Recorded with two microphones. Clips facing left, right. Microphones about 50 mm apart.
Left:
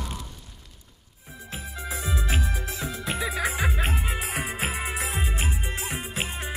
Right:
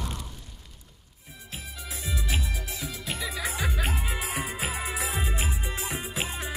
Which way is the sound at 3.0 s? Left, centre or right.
Left.